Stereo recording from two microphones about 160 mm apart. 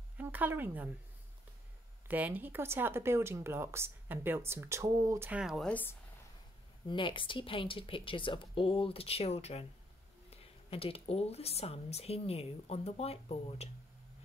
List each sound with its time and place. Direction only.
0.2 s speech: 10° right (ahead or behind)
2.0 s speech: 10° right (ahead or behind)
5.3 s speech: 5° right (ahead or behind)
5.7 s speech: 10° left (ahead or behind)
6.9 s speech: 30° left (ahead or behind)